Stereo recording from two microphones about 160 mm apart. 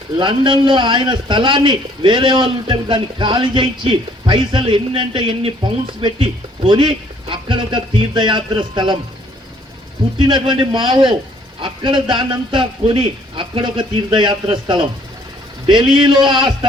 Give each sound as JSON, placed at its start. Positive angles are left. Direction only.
{"t": 0.2, "sound": "a man's voice", "side_deg": -30}
{"t": 10.2, "sound": "a man's voice", "side_deg": -30}